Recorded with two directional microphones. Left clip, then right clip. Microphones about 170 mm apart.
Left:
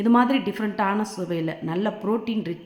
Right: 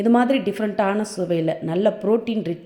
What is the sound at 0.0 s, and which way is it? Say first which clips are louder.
A woman's voice: right 2 dB; 15° right (ahead or behind).